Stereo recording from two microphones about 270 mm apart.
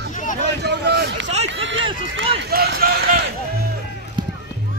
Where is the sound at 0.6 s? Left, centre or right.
Right.